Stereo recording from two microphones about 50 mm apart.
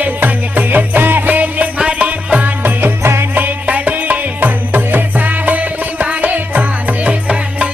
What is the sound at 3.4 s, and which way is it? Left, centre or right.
Music, right.